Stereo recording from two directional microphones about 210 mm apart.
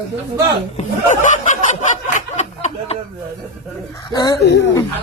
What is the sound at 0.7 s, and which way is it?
Snicker, 35° left (ahead or behind).